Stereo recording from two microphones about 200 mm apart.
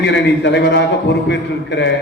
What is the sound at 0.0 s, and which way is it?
A man's voice, 60° left (ahead or behind).